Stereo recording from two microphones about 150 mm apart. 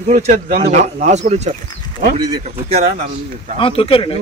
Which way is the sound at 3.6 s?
40° left (ahead or behind).